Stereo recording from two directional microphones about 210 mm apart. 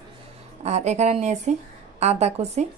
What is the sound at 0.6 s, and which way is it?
A woman's voice, 30° right (ahead or behind).